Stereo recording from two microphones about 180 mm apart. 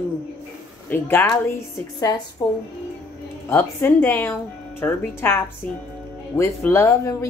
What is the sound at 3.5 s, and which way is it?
A woman's voice, 10° left (ahead or behind).